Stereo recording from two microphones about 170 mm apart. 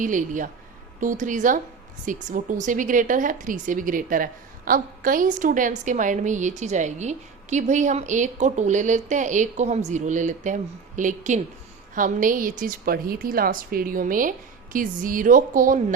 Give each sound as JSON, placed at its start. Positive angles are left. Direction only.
{"t": 0.0, "sound": "a woman's voice", "side_deg": -50}